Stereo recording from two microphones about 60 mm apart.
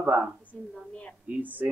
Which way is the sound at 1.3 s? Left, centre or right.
Right.